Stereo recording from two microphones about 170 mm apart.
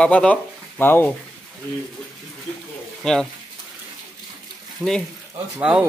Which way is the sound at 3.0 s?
Centre (ahead or behind).